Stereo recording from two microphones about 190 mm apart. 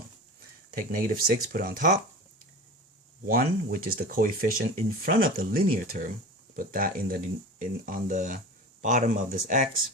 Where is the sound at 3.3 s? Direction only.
50° right (ahead or behind).